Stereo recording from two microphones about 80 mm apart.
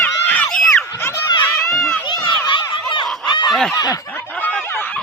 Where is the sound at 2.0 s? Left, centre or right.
Left.